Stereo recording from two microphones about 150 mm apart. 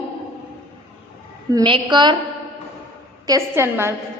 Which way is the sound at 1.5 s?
30° right (ahead or behind).